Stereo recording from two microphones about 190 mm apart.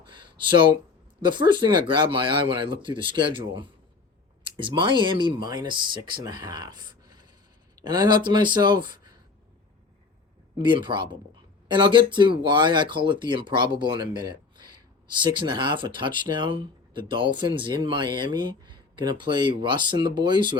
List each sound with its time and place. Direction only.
0.0 s a sound: 25° right (ahead or behind)
1.2 s speech: 25° right (ahead or behind)
10.8 s speech: 25° right (ahead or behind)